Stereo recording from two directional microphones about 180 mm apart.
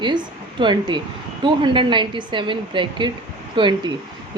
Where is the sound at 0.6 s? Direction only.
25° right (ahead or behind).